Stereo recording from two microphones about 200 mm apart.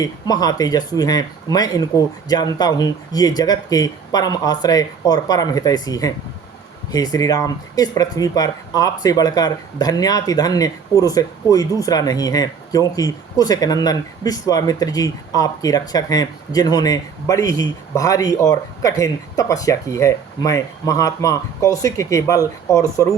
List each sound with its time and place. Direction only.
0.0 s speech: 20° left (ahead or behind)